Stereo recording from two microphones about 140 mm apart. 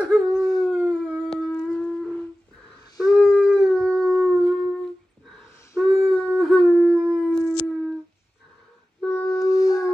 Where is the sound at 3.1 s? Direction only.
Centre (ahead or behind).